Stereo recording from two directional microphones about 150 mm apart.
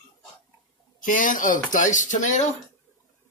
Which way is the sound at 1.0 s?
60° left (ahead or behind).